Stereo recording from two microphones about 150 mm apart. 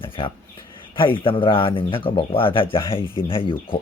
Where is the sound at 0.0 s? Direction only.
35° left (ahead or behind).